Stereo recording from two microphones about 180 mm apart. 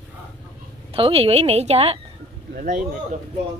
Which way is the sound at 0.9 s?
30° right (ahead or behind).